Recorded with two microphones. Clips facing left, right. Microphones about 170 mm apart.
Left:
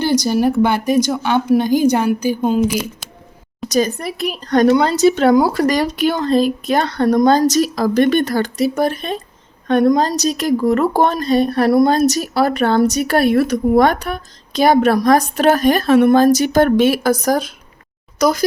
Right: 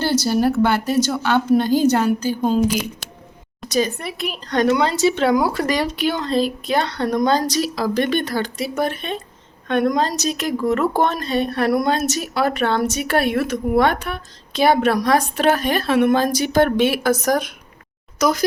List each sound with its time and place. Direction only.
0.0 s a woman's voice: 15° left (ahead or behind)
3.7 s a woman's voice: 40° left (ahead or behind)